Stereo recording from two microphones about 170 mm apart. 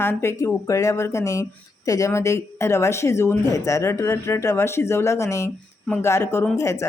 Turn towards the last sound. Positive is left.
turn(degrees=15)  # may be behind; listen again after turning